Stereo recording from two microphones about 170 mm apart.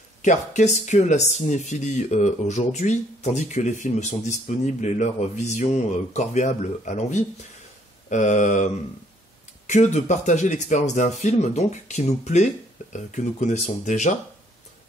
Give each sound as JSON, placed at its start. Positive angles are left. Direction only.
{"t": 0.2, "sound": "speech", "side_deg": 45}
{"t": 9.7, "sound": "speech", "side_deg": 45}